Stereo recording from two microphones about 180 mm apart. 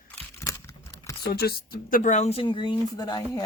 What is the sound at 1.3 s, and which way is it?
Speech, 60° left (ahead or behind).